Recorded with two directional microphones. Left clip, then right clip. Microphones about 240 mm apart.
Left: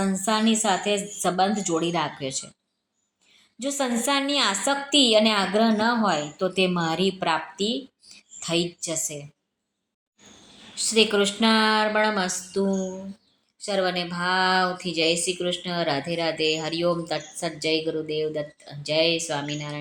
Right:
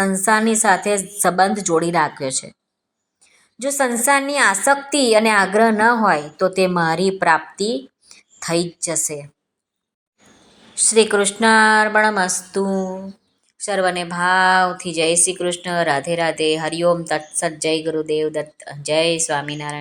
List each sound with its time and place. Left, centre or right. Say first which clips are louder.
0.0 s a woman's voice: right 8 dB; right
3.6 s a woman's voice: right 7 dB; right
10.8 s a woman's voice: right 5 dB; right